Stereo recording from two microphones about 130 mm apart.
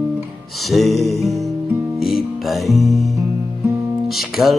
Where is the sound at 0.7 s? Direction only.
Centre (ahead or behind).